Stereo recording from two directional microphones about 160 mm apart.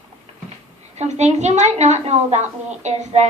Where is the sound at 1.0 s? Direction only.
45° right (ahead or behind).